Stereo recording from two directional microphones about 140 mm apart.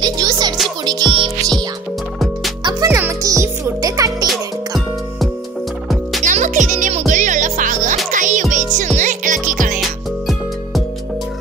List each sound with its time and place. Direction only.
0.0 s music: 30° right (ahead or behind)
2.6 s music: 25° right (ahead or behind)
4.3 s music: centre (ahead or behind)
6.2 s music: 65° right (ahead or behind)
9.8 s music: centre (ahead or behind)